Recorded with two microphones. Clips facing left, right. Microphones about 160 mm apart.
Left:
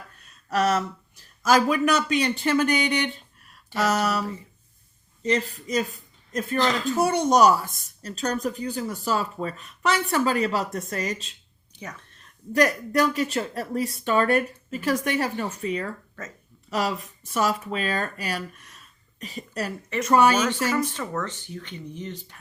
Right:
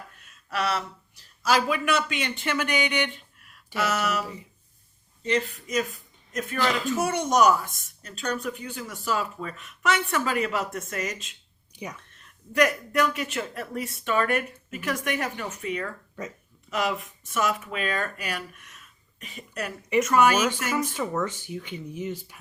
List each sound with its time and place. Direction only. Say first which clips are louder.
0.2 s speech: left 6 dB; 40° left (ahead or behind)
20.7 s speech: even; 10° right (ahead or behind)